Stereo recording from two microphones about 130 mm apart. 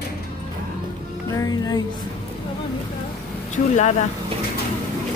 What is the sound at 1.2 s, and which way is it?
Speech, 25° left (ahead or behind).